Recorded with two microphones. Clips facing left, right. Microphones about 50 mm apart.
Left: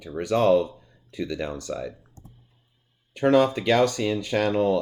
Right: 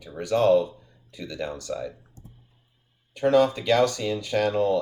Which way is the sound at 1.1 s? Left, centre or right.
Left.